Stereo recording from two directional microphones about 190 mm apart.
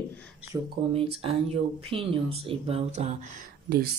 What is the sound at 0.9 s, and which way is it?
Speech, 30° right (ahead or behind).